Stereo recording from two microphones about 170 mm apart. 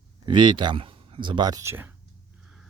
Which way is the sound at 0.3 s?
30° right (ahead or behind).